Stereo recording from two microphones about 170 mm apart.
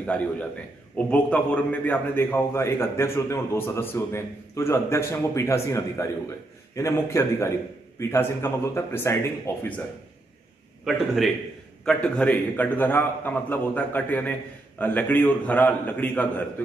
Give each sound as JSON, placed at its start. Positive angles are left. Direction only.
{"t": 0.0, "sound": "a man's voice", "side_deg": 10}
{"t": 10.9, "sound": "a man's voice", "side_deg": 0}